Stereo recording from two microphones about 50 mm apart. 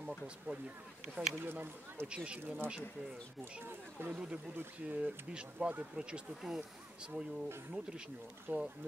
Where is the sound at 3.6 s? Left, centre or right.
Right.